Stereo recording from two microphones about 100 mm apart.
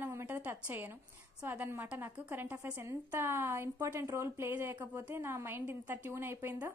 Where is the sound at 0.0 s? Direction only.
25° right (ahead or behind).